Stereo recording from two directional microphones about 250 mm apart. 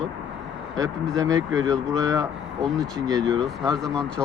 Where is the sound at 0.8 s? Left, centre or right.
Centre.